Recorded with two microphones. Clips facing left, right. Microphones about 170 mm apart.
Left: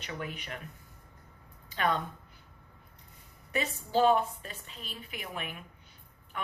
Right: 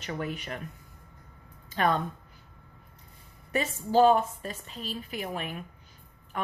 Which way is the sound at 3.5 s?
45° right (ahead or behind).